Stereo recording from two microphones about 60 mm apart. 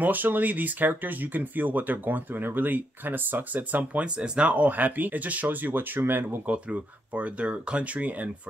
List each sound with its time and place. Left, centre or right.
0.0 s speech: right
6.4 s speech: right